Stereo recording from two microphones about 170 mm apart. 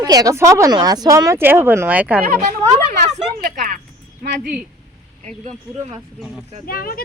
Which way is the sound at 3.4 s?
50° right (ahead or behind).